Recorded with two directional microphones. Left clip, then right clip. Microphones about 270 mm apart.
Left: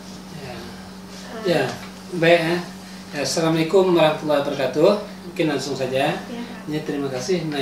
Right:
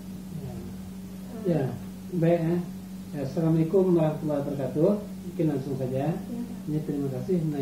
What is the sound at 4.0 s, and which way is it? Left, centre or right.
A woman's voice, centre.